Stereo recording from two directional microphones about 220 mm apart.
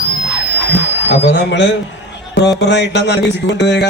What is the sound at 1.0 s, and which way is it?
A man's voice, 50° left (ahead or behind).